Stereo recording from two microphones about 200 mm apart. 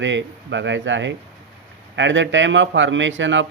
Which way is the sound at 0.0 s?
65° right (ahead or behind).